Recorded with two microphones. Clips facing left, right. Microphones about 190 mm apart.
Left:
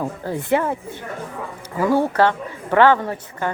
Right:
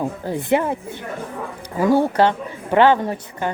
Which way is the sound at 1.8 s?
15° right (ahead or behind).